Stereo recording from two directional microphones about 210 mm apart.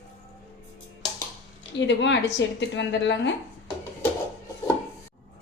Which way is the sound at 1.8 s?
55° left (ahead or behind).